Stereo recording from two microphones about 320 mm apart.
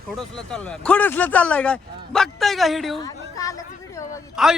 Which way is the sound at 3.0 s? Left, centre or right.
Centre.